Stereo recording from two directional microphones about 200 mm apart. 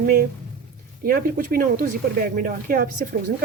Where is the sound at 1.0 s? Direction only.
45° right (ahead or behind).